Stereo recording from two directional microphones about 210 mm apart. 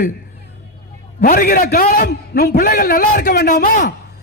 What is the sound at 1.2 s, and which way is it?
A man's voice, 40° left (ahead or behind).